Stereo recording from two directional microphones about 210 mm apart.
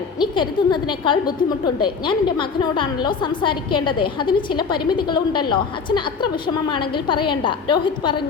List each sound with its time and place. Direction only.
0.2 s a woman's voice: 20° left (ahead or behind)